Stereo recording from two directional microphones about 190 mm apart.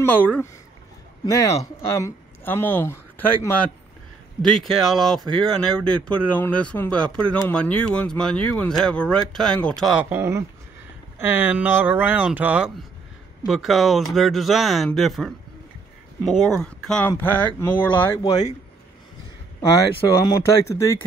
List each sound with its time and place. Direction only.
0.0 s speech: 10° left (ahead or behind)
20.6 s speech: 15° left (ahead or behind)